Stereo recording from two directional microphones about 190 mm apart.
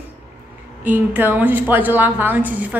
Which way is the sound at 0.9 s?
10° right (ahead or behind).